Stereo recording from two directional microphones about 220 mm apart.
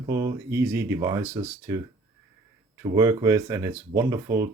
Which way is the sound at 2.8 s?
15° right (ahead or behind).